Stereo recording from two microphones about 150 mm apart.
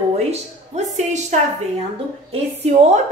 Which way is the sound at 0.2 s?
45° right (ahead or behind).